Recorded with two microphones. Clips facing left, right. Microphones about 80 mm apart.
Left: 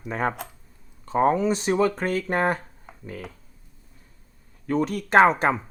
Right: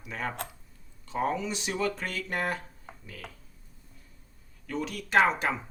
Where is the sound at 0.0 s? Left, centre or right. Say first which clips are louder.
Left 8 dB; left.